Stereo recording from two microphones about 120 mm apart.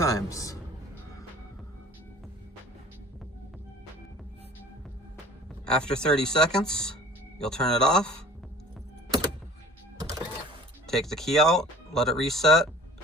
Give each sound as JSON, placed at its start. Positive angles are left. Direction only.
{"t": 0.0, "sound": "a man's voice", "side_deg": 25}
{"t": 5.6, "sound": "speech", "side_deg": 5}
{"t": 10.8, "sound": "speech", "side_deg": 5}